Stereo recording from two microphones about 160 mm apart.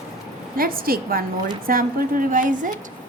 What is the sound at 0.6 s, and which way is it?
A woman's voice, 65° right (ahead or behind).